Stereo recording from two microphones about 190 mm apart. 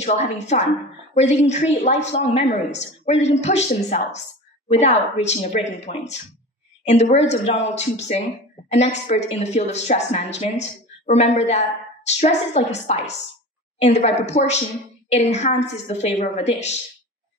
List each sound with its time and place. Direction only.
0.0 s a woman's voice: 35° left (ahead or behind)
14.3 s a woman's voice: 35° left (ahead or behind)